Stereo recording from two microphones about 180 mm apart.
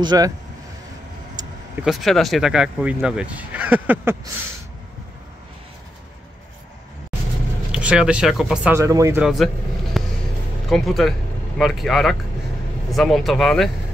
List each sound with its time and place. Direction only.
0.0 s speech: 25° right (ahead or behind)
1.4 s vehicle: 20° right (ahead or behind)
1.9 s speech: centre (ahead or behind)
7.7 s speech: 5° right (ahead or behind)
8.7 s speech: 15° right (ahead or behind)
9.2 s speech: centre (ahead or behind)
9.9 s vehicle: centre (ahead or behind)
10.7 s speech: centre (ahead or behind)